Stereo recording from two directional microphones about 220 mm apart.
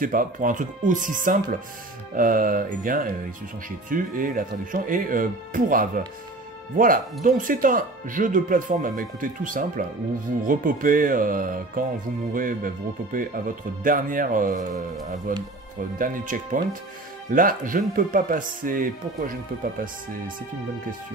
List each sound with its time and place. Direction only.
0.0 s speech: 40° right (ahead or behind)
7.2 s speech: 40° right (ahead or behind)